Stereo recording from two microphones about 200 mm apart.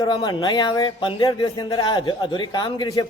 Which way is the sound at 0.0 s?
20° left (ahead or behind).